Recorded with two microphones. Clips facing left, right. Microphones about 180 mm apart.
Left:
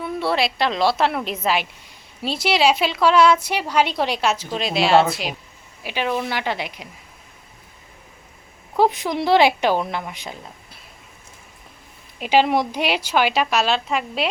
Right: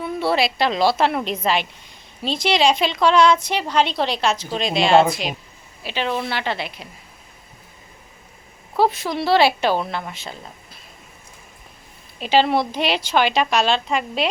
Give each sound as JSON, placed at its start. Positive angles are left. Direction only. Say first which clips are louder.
{"t": 0.0, "sound": "a woman's voice", "louder": "right 1 dB", "side_deg": 0}
{"t": 8.7, "sound": "a woman's voice", "louder": "left 1 dB", "side_deg": 15}
{"t": 12.2, "sound": "a woman's voice", "louder": "even", "side_deg": 10}